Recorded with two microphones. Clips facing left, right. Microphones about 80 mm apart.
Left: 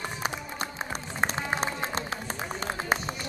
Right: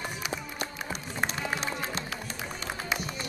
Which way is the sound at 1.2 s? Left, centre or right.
Left.